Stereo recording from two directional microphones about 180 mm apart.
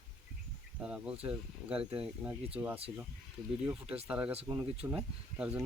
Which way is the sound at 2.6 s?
15° right (ahead or behind).